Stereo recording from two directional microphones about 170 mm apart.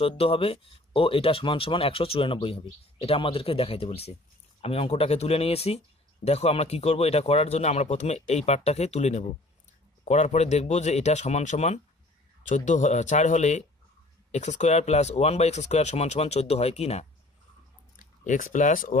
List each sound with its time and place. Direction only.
0.0 s speech: 35° left (ahead or behind)
17.9 s speech: 50° left (ahead or behind)